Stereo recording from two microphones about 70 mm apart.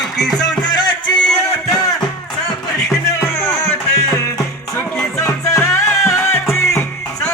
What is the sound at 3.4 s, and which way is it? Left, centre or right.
Music, left.